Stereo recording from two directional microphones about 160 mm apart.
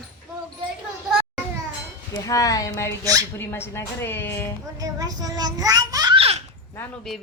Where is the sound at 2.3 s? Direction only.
20° left (ahead or behind).